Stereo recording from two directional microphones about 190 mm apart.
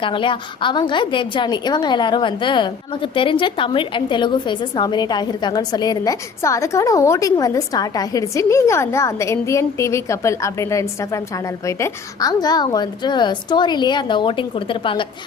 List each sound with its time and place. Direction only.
0.0 s a woman's voice: 25° left (ahead or behind)